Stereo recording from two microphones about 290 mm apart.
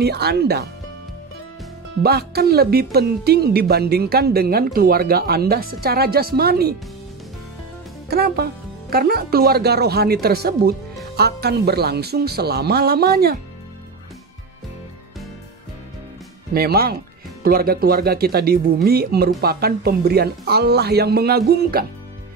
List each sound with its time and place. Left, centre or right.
0.0 s a woman's voice: right
2.0 s a woman's voice: right
8.1 s a woman's voice: right
16.5 s a woman's voice: right